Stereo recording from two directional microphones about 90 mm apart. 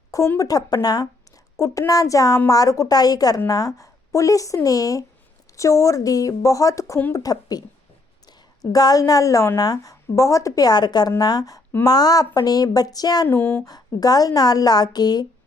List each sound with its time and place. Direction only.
0.3 s a woman's voice: 45° left (ahead or behind)
1.5 s a woman's voice: 35° left (ahead or behind)
13.2 s speech: 20° left (ahead or behind)
13.7 s a woman's voice: 45° left (ahead or behind)